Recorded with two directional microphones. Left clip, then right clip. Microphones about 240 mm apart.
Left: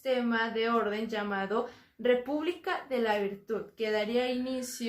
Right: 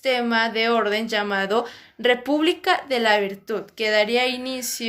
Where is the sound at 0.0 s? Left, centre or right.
Right.